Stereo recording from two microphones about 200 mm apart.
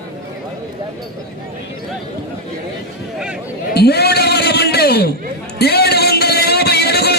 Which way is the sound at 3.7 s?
55° left (ahead or behind).